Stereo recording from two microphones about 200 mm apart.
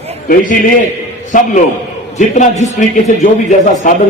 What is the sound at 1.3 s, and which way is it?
A man's voice, 40° left (ahead or behind).